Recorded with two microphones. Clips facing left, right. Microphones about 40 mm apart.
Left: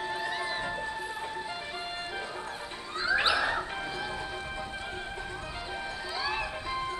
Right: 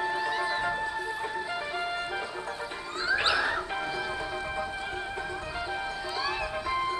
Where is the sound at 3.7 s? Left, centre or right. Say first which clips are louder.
Right 3 dB; right.